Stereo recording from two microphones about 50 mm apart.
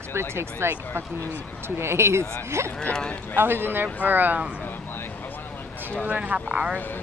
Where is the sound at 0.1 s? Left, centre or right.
Right.